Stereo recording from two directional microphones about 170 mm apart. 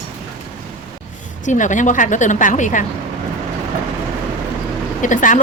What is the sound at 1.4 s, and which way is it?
A woman's voice, 45° left (ahead or behind).